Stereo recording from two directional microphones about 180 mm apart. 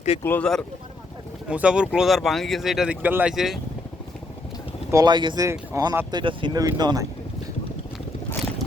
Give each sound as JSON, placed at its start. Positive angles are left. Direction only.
{"t": 0.2, "sound": "speech", "side_deg": 10}
{"t": 1.5, "sound": "speech", "side_deg": -5}
{"t": 4.9, "sound": "speech", "side_deg": -20}